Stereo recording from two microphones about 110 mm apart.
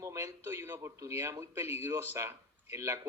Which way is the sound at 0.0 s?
25° right (ahead or behind).